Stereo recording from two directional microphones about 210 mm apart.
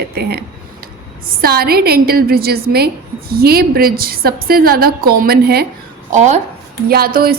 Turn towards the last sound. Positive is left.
turn(degrees=-45)  # may be behind; listen again after turning